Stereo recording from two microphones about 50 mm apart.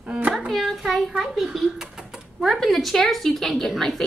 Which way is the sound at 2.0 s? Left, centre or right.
Centre.